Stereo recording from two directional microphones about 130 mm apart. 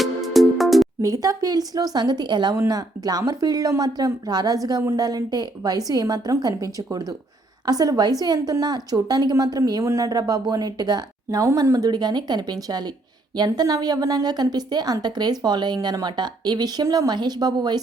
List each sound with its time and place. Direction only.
0.0 s music: centre (ahead or behind)
1.0 s a woman's voice: 25° right (ahead or behind)